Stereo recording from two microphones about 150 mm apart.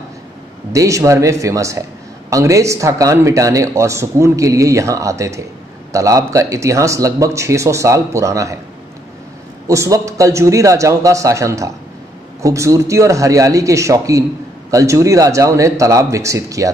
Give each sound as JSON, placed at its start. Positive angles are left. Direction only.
{"t": 0.7, "sound": "a man's voice", "side_deg": -20}
{"t": 9.7, "sound": "a man's voice", "side_deg": -20}